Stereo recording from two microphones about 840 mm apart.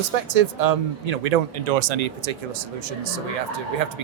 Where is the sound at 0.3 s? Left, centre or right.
Right.